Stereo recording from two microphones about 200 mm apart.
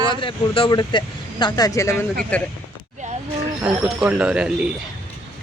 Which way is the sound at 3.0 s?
35° right (ahead or behind).